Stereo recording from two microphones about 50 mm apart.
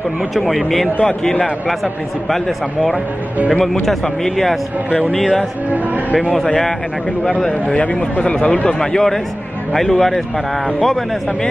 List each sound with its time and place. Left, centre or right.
0.3 s speech: centre
1.0 s a man's voice: centre
6.3 s a man's voice: centre